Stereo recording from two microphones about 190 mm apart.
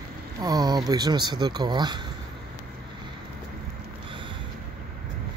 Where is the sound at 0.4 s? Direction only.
20° right (ahead or behind).